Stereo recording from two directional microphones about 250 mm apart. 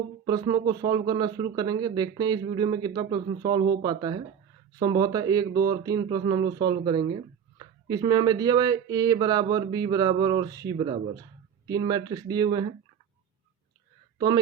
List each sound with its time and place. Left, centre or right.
0.3 s a man's voice: centre